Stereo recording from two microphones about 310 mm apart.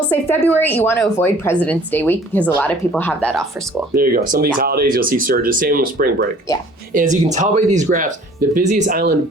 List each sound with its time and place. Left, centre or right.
0.4 s speech: centre
3.9 s speech: right